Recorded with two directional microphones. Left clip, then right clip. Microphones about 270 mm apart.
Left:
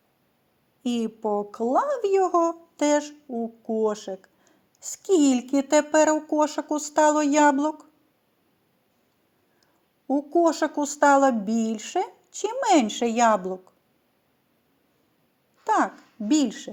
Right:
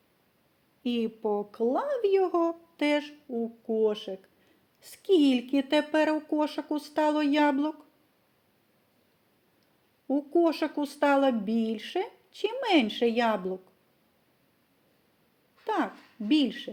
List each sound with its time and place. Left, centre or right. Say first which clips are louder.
0.8 s speech: left 2 dB; left
10.1 s speech: left 4 dB; left
15.6 s speech: left 7 dB; left